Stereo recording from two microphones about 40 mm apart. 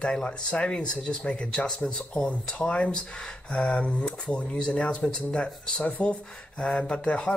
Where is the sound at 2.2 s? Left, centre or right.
Left.